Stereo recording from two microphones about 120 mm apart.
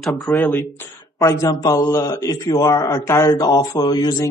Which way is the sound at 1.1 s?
25° left (ahead or behind).